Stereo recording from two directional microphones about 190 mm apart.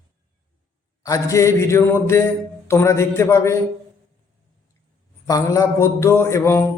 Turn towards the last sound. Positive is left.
turn(degrees=15)  # may be behind; listen again after turning